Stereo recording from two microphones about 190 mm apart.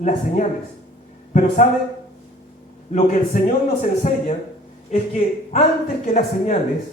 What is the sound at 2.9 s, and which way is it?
A man's voice, 40° left (ahead or behind).